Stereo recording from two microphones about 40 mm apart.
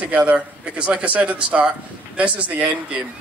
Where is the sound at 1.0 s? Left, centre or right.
Right.